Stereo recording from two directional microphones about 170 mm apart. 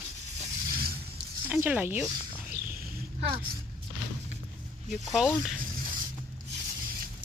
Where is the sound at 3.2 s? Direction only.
30° right (ahead or behind).